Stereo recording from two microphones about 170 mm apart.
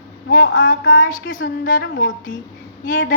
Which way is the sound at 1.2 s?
50° left (ahead or behind).